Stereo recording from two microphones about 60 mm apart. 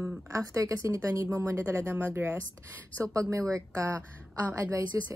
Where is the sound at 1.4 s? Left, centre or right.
Right.